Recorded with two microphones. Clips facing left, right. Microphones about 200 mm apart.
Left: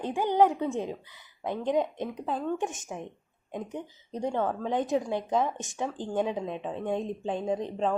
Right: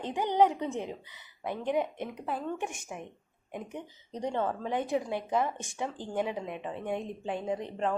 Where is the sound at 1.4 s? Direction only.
20° left (ahead or behind).